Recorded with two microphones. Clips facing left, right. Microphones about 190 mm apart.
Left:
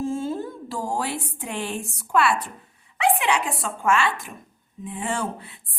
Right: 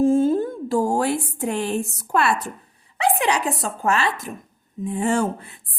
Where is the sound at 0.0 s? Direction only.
50° right (ahead or behind).